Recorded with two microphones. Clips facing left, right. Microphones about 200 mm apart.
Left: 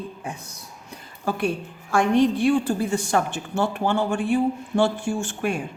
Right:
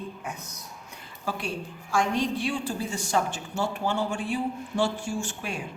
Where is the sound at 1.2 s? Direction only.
55° left (ahead or behind).